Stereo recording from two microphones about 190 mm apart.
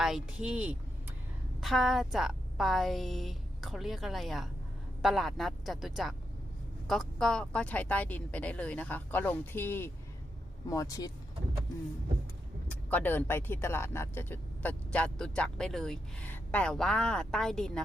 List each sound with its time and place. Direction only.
0.0 s a woman's voice: 5° right (ahead or behind); by 11.1 s 20° left (ahead or behind)
12.6 s speech: 10° left (ahead or behind)